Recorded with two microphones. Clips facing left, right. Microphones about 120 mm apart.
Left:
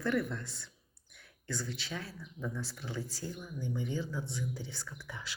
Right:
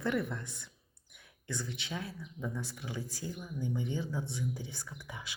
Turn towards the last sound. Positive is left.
turn(degrees=-20)  # may be behind; listen again after turning